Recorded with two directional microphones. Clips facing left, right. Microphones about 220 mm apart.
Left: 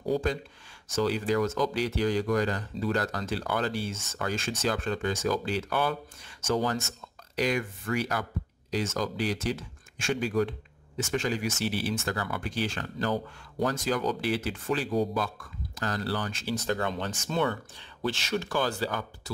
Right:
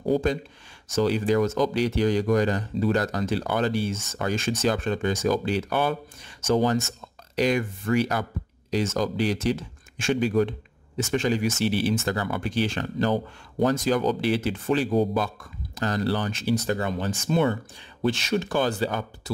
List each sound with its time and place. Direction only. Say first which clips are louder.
0.1 s speech: right 5 dB; 20° right (ahead or behind)